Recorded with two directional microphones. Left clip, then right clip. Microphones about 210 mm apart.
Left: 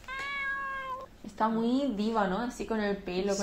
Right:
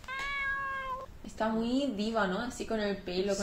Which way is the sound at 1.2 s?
20° left (ahead or behind).